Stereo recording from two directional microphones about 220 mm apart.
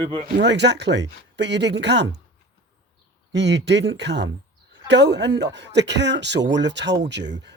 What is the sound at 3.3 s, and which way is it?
Speech, 50° right (ahead or behind).